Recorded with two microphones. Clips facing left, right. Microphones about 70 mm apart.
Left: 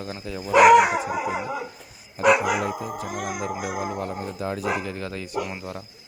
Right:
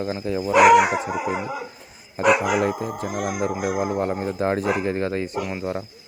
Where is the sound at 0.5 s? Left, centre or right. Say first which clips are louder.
Even; centre.